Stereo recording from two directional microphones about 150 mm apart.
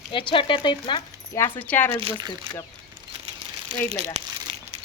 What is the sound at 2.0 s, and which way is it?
Speech, 35° right (ahead or behind).